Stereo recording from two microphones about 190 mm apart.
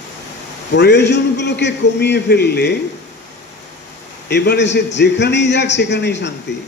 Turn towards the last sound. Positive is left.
turn(degrees=65)  # may be behind; listen again after turning